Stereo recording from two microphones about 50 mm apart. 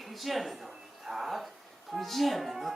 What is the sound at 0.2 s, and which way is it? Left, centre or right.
Speech, centre.